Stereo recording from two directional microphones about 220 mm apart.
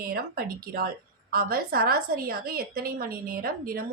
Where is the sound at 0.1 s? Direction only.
40° right (ahead or behind).